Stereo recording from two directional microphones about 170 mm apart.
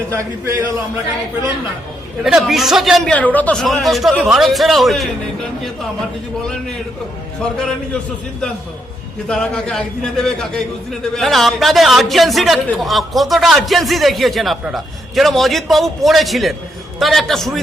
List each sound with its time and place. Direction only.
0.1 s a man's voice: 15° right (ahead or behind)
2.2 s a man's voice: centre (ahead or behind)
9.2 s a man's voice: 5° left (ahead or behind)